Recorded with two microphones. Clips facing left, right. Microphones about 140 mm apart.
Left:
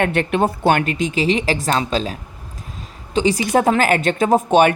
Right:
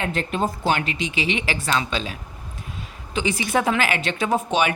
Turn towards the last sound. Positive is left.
turn(degrees=50)  # may be behind; listen again after turning